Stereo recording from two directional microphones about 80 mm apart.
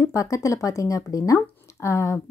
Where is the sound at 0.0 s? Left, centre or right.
Left.